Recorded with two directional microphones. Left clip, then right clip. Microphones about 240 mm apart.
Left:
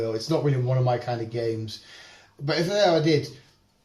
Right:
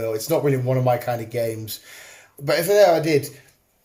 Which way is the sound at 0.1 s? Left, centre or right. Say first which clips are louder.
Right 5 dB; right.